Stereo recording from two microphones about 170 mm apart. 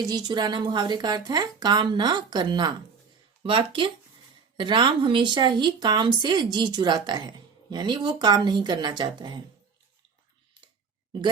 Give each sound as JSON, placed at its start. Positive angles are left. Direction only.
{"t": 0.0, "sound": "a woman's voice", "side_deg": -25}